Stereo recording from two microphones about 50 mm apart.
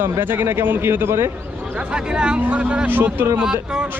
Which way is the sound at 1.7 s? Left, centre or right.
Centre.